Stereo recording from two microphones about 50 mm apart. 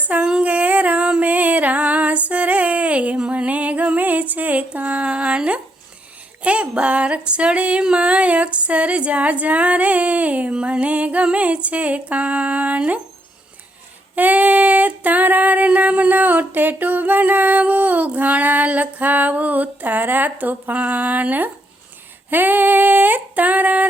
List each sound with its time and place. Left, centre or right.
0.2 s music: centre
3.2 s a sound: right
14.2 s female singing: right